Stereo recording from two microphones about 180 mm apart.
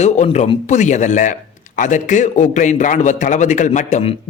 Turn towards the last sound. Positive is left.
turn(degrees=40)  # may be behind; listen again after turning